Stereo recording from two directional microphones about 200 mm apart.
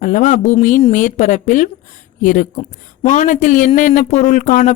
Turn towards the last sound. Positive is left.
turn(degrees=40)  # may be behind; listen again after turning